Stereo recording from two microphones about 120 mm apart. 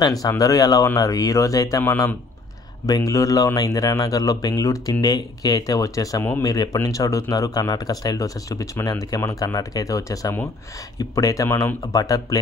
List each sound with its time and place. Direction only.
0.0 s speech: 30° left (ahead or behind)